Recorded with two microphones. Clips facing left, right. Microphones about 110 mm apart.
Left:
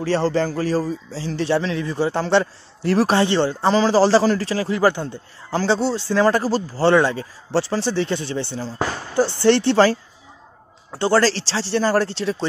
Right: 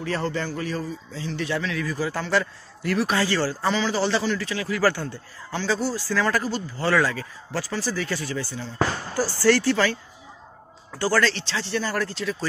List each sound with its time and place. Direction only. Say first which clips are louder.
0.0 s speech: left 7 dB; 30° left (ahead or behind)
3.7 s speech: left 12 dB; 35° left (ahead or behind); by 5.2 s 20° left (ahead or behind)
5.5 s speech: left 6 dB; 30° left (ahead or behind)